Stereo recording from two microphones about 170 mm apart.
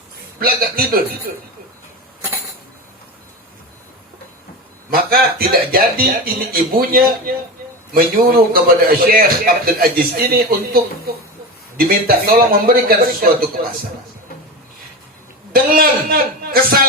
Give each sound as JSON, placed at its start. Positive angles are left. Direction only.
{"t": 0.3, "sound": "a man's voice", "side_deg": -60}
{"t": 4.9, "sound": "a man's voice", "side_deg": -60}
{"t": 15.5, "sound": "a man's voice", "side_deg": -60}